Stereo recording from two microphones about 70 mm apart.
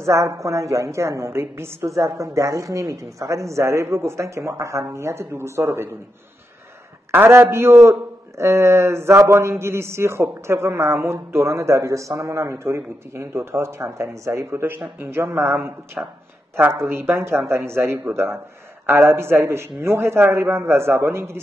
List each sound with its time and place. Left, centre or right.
0.0 s a woman's voice: right
7.1 s a man's voice: right